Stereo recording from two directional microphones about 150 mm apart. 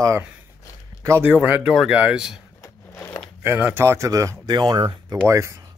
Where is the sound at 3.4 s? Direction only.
15° right (ahead or behind); by 5.2 s 30° right (ahead or behind).